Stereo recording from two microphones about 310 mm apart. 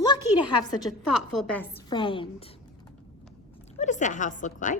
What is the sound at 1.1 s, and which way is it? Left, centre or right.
A woman's voice, centre.